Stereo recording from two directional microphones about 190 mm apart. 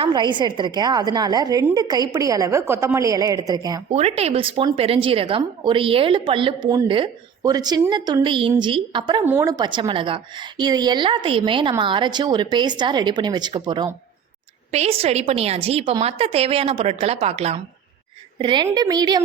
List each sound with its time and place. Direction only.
0.0 s a woman's voice: 25° right (ahead or behind)
3.9 s a woman's voice: 35° right (ahead or behind)
9.2 s a woman's voice: 10° right (ahead or behind)